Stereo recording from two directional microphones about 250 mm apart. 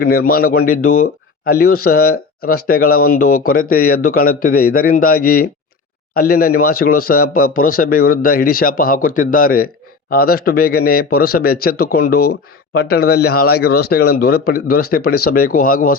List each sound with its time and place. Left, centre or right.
0.0 s a man's voice: left